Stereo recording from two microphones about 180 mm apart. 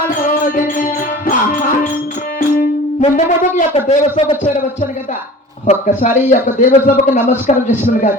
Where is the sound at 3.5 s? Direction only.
35° left (ahead or behind).